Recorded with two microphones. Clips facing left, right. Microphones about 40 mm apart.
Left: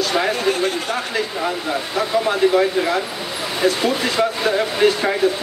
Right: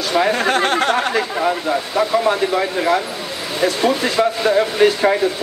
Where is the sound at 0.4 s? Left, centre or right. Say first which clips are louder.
Right 4 dB; right.